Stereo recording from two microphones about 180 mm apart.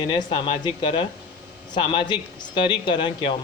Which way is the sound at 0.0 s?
25° left (ahead or behind).